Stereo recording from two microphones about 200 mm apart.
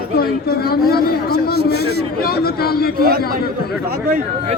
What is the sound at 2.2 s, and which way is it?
Speech, 50° left (ahead or behind).